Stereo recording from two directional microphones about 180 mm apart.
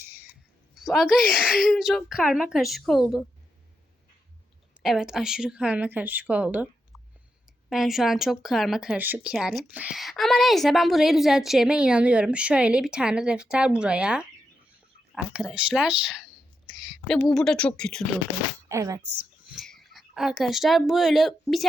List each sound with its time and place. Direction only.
0.8 s speech: centre (ahead or behind)
4.8 s a woman's voice: 5° right (ahead or behind)
7.7 s speech: centre (ahead or behind)
18.7 s a woman's voice: 15° right (ahead or behind)
19.1 s a child's voice: 5° right (ahead or behind)